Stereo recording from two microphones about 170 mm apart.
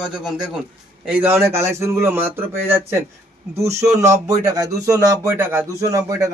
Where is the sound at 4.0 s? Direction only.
15° right (ahead or behind).